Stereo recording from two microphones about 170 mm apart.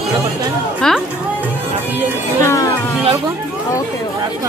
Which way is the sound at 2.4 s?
20° left (ahead or behind).